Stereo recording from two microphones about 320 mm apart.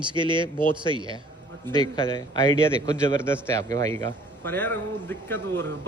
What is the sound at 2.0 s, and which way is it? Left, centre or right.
A man's voice, centre.